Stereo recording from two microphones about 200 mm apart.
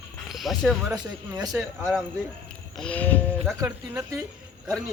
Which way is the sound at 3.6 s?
15° right (ahead or behind).